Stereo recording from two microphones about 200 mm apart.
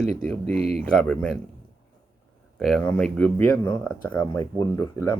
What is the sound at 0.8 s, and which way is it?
Speech, 5° left (ahead or behind).